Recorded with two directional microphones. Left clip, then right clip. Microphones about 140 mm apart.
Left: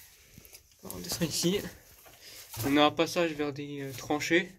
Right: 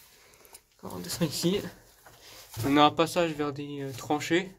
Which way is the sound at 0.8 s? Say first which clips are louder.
Right 2 dB; 20° right (ahead or behind).